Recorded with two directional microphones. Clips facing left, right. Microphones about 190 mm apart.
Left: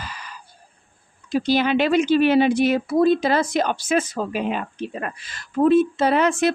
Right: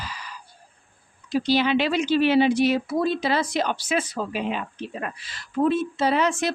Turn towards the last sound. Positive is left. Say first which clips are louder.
# left 4 dB
turn(degrees=55)  # may be behind; listen again after turning